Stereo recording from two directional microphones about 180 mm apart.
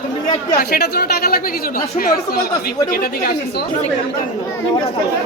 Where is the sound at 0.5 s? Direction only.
60° left (ahead or behind).